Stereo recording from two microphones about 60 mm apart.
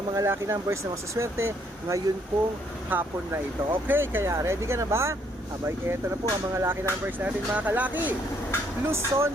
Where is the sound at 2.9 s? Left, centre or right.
Right.